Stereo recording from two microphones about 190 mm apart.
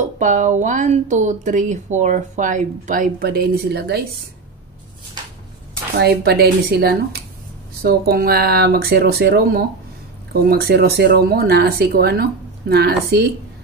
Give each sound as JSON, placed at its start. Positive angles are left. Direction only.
{"t": 0.0, "sound": "speech", "side_deg": -40}
{"t": 5.9, "sound": "speech", "side_deg": -60}